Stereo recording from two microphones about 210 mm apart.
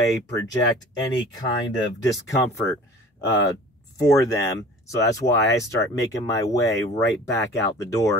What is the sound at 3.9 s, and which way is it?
Speech, 15° left (ahead or behind).